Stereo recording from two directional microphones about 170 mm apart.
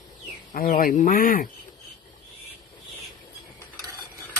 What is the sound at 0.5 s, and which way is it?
Speech, 60° left (ahead or behind).